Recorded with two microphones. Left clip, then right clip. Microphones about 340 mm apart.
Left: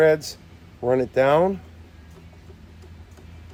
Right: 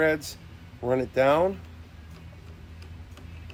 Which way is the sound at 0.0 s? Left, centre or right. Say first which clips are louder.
Left 7 dB; left.